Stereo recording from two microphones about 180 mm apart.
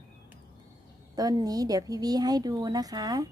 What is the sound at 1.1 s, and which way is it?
A woman's voice, 20° right (ahead or behind).